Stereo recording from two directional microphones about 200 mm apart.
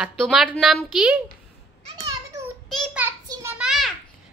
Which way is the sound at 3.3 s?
15° right (ahead or behind).